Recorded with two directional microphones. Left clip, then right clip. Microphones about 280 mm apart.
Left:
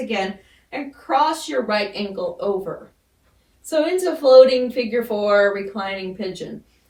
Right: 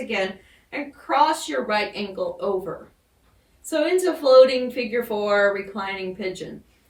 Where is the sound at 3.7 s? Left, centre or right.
Centre.